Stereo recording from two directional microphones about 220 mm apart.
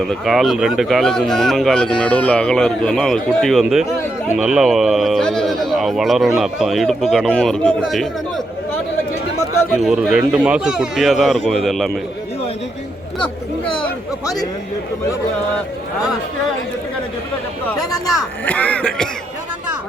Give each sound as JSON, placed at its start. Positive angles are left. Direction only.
{"t": 0.0, "sound": "a man's voice", "side_deg": 0}
{"t": 9.7, "sound": "a man's voice", "side_deg": 0}
{"t": 13.8, "sound": "speech", "side_deg": 15}
{"t": 18.4, "sound": "a man's voice", "side_deg": 5}